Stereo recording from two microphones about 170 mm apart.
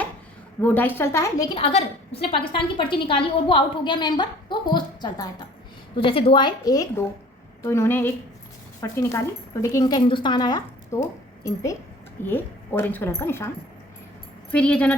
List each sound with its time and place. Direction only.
0.6 s a woman's voice: 10° left (ahead or behind)
1.5 s a woman's voice: 35° left (ahead or behind); by 13.5 s 15° left (ahead or behind)
14.5 s a woman's voice: 5° left (ahead or behind)